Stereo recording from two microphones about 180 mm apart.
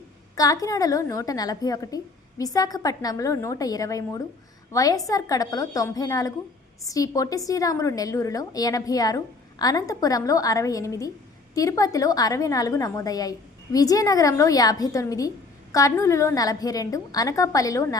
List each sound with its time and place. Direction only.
0.3 s a woman's voice: 20° left (ahead or behind)